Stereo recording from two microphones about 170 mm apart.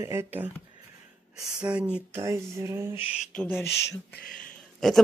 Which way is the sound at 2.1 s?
15° right (ahead or behind).